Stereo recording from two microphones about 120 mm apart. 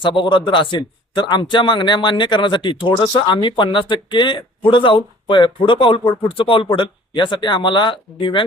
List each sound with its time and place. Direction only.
0.0 s a man's voice: 45° left (ahead or behind)